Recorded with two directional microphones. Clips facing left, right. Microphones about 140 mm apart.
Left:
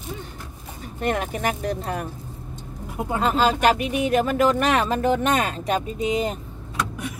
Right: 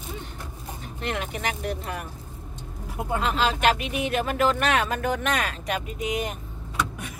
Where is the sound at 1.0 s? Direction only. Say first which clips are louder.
Left 6 dB; 45° left (ahead or behind).